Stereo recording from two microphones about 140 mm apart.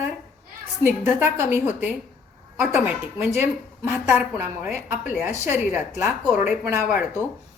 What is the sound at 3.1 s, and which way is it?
A woman's voice, 15° right (ahead or behind).